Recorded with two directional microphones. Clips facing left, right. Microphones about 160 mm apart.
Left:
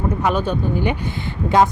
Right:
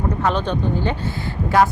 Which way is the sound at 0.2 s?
10° left (ahead or behind).